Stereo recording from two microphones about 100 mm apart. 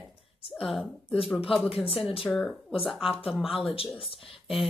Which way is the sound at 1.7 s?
75° left (ahead or behind).